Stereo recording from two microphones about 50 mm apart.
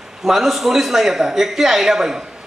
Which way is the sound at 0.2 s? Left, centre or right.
Centre.